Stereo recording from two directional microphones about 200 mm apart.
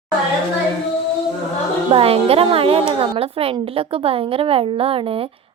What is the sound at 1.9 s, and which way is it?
A woman's voice, 30° right (ahead or behind).